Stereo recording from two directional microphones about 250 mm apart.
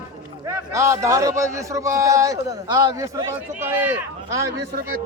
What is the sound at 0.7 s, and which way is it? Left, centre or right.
A man's voice, centre.